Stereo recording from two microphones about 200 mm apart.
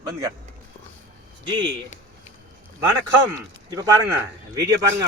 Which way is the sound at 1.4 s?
25° right (ahead or behind).